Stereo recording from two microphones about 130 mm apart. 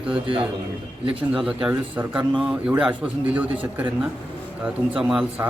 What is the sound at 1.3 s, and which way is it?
A man's voice, 5° right (ahead or behind).